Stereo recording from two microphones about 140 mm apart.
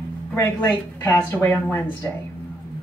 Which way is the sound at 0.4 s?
30° left (ahead or behind).